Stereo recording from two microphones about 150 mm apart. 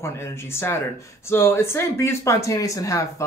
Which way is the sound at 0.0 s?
15° left (ahead or behind).